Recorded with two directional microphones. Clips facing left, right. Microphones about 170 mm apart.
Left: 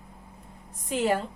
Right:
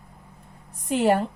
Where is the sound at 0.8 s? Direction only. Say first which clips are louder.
Right 4 dB; 65° right (ahead or behind).